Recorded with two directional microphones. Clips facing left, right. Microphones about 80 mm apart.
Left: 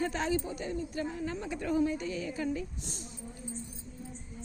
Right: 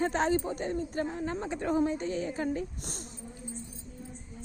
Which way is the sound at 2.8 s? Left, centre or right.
Right.